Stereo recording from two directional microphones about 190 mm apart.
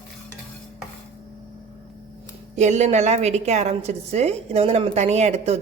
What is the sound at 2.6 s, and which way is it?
A woman's voice, 35° right (ahead or behind).